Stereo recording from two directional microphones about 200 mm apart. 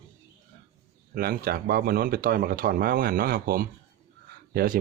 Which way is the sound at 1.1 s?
50° right (ahead or behind).